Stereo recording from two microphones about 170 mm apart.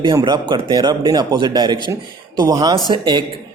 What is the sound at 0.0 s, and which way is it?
Speech, 25° right (ahead or behind).